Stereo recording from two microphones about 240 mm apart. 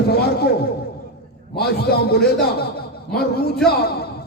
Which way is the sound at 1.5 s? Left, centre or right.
Left.